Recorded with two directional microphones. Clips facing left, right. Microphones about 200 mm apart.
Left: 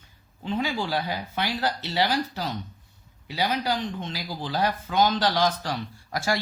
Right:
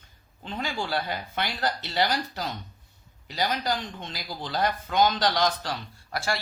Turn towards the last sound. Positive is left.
turn(degrees=15)  # may be behind; listen again after turning